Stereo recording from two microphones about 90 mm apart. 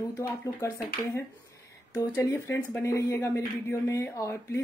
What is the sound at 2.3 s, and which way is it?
Speech, 25° left (ahead or behind).